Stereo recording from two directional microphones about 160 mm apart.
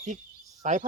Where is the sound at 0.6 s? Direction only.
50° right (ahead or behind).